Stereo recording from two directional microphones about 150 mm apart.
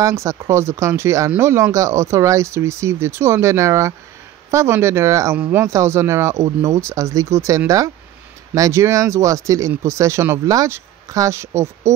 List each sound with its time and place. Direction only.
0.0 s speech: 20° right (ahead or behind)